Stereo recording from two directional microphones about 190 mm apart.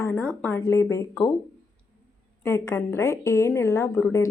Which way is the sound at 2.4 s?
15° left (ahead or behind).